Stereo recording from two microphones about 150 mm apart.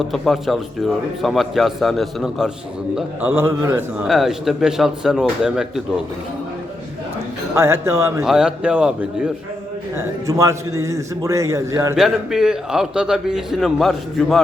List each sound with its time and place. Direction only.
0.0 s a man's voice: centre (ahead or behind)
2.9 s a man's voice: 10° right (ahead or behind)
4.0 s a man's voice: centre (ahead or behind)
7.5 s a man's voice: 15° right (ahead or behind)
8.2 s a man's voice: 5° right (ahead or behind)
9.9 s a man's voice: 20° right (ahead or behind)
11.9 s a man's voice: 5° right (ahead or behind)